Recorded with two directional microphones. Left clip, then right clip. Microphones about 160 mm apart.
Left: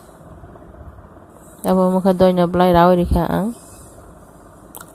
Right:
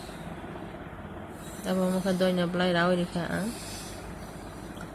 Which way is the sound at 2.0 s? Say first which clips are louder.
Left 13 dB; 60° left (ahead or behind).